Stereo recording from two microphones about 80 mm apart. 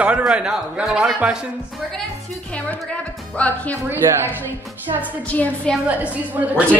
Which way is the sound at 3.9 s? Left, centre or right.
Right.